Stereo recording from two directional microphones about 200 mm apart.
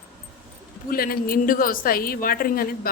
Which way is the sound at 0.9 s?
45° left (ahead or behind).